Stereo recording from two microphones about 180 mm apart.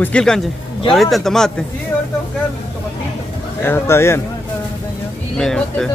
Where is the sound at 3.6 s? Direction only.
15° left (ahead or behind).